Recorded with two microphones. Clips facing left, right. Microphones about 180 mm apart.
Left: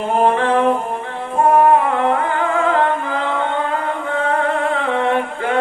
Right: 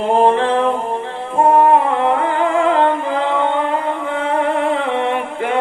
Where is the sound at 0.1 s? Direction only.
30° right (ahead or behind).